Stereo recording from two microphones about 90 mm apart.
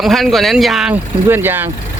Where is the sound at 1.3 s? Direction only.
25° right (ahead or behind).